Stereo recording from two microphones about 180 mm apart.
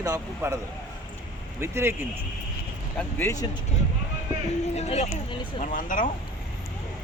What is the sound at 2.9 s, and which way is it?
Speech, 15° left (ahead or behind).